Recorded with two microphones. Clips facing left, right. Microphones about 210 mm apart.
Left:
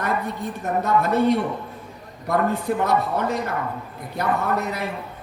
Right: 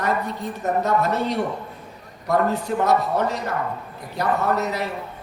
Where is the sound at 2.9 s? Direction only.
55° left (ahead or behind).